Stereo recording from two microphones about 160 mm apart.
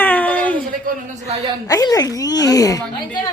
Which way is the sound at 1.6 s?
20° left (ahead or behind).